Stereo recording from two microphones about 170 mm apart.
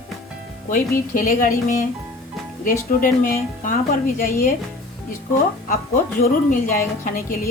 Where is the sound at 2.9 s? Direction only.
50° left (ahead or behind).